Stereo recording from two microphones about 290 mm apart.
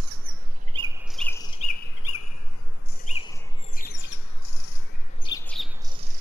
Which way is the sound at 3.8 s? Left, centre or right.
Left.